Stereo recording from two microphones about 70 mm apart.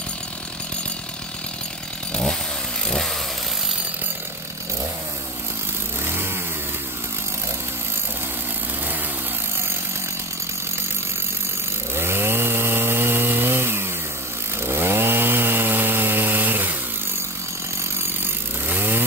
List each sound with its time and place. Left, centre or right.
2.9 s chainsaw: centre
11.9 s chainsaw: right
18.7 s chainsaw: right